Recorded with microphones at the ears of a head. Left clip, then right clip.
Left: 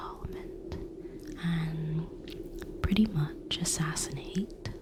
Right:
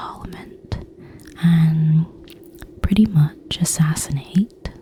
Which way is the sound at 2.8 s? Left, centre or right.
Right.